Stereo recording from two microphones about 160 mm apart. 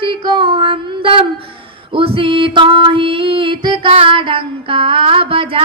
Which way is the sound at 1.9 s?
35° right (ahead or behind).